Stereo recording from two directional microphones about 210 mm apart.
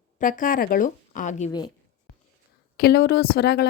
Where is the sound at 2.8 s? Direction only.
50° left (ahead or behind).